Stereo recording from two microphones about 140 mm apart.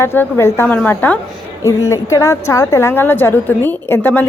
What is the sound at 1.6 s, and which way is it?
A woman's voice, 20° left (ahead or behind).